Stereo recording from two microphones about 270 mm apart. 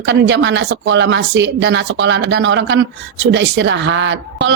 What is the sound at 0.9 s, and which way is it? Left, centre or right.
Speech, right.